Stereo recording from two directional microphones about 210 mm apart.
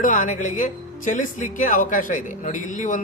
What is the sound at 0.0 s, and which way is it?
Speech, 40° left (ahead or behind).